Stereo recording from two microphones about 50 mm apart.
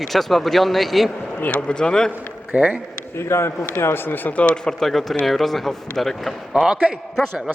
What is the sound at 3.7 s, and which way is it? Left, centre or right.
Speech, left.